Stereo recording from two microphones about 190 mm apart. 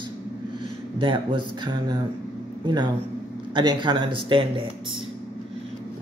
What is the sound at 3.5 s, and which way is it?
Speech, 25° right (ahead or behind).